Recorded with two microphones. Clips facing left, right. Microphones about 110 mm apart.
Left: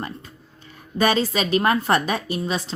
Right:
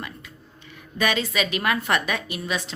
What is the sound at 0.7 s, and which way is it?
A woman's voice, 35° left (ahead or behind).